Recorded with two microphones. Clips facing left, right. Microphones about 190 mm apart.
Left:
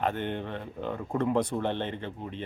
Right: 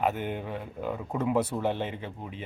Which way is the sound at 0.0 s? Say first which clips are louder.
Right 1 dB; 5° right (ahead or behind).